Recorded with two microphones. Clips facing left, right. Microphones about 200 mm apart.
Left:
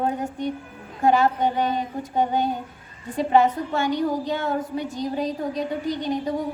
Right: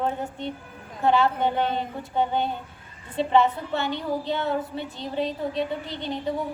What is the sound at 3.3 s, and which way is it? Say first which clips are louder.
A woman's voice: left 2 dB; 45° left (ahead or behind).